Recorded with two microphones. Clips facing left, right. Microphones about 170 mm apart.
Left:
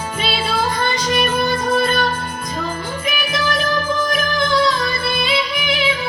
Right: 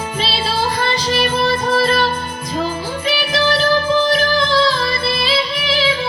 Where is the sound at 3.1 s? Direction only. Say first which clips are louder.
Right 5 dB; 30° right (ahead or behind).